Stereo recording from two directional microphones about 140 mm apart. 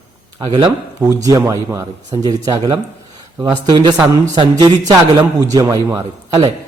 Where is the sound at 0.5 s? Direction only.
25° right (ahead or behind).